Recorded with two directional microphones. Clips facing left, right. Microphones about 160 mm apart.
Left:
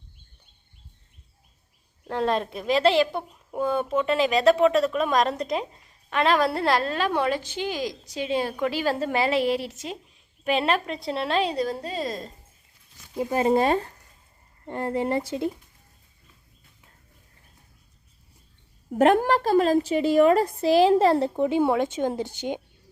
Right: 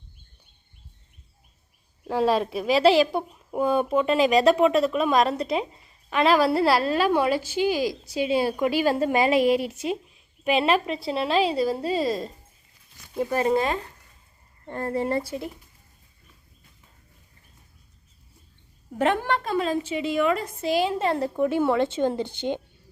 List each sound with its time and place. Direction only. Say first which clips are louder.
2.0 s a woman's voice: right 3 dB; 5° right (ahead or behind)
13.4 s a woman's voice: left 4 dB; 30° left (ahead or behind)
14.7 s speech: even; 20° left (ahead or behind)
18.9 s a woman's voice: left 5 dB; 45° left (ahead or behind)
21.3 s speech: left 1 dB; 20° left (ahead or behind)
21.7 s a woman's voice: right 1 dB; 10° left (ahead or behind)